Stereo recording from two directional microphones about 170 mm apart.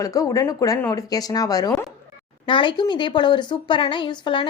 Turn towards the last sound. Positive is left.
turn(degrees=30)  # may be behind; listen again after turning